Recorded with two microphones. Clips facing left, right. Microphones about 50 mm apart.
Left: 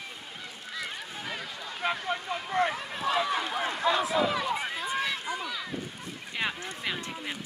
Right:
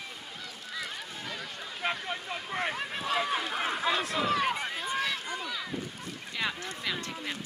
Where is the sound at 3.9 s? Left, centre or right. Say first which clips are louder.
Left 4 dB; centre.